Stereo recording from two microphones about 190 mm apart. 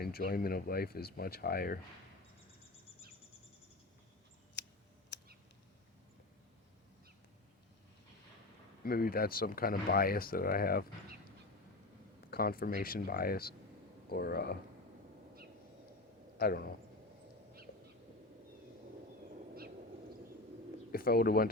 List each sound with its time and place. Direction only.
0.0 s speech: 50° left (ahead or behind)
4.6 s a sound: 65° left (ahead or behind)
5.1 s cat: 70° left (ahead or behind)
8.8 s speech: 50° left (ahead or behind)
12.3 s speech: 50° left (ahead or behind)
16.4 s speech: 55° left (ahead or behind)
20.9 s speech: 50° left (ahead or behind)